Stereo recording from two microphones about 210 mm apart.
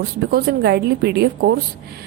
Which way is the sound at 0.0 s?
45° right (ahead or behind).